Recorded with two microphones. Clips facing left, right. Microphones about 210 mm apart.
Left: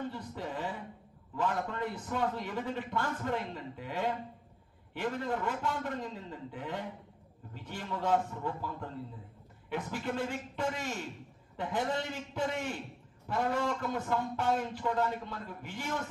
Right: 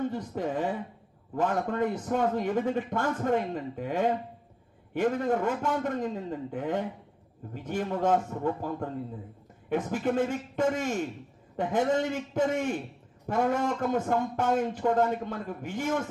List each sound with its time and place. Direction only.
0.0 s a man's voice: 50° right (ahead or behind)